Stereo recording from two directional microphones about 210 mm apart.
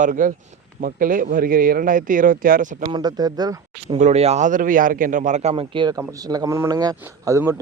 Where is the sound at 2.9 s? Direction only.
20° right (ahead or behind).